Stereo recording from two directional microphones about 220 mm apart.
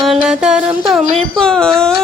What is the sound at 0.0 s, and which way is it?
Music, centre (ahead or behind).